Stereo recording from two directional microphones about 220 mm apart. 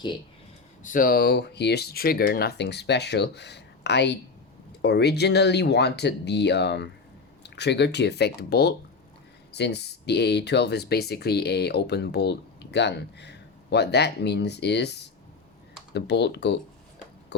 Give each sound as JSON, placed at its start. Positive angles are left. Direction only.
{"t": 0.8, "sound": "speech", "side_deg": 35}